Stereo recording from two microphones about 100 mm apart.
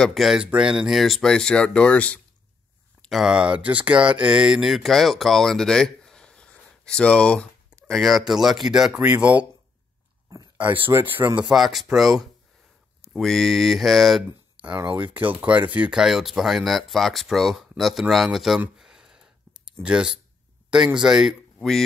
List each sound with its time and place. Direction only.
0.0 s speech: centre (ahead or behind)
3.0 s speech: centre (ahead or behind)
10.3 s a sound: 40° right (ahead or behind)
10.9 s speech: 20° right (ahead or behind)
11.4 s speech: centre (ahead or behind)
14.6 s a sound: 15° right (ahead or behind)
15.1 s speech: 15° right (ahead or behind)
18.8 s a sound: 5° right (ahead or behind)
21.0 s speech: 5° right (ahead or behind)